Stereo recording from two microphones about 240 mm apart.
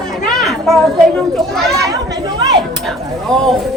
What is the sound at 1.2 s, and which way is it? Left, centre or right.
Speech, centre.